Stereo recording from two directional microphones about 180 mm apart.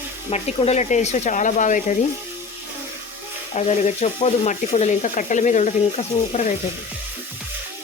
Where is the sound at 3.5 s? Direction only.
40° left (ahead or behind).